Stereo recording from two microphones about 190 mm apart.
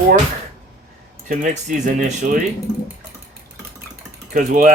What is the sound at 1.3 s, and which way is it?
Speech, 45° right (ahead or behind).